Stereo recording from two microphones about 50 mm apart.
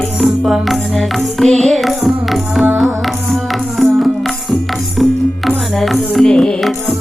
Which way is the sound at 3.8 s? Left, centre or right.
Centre.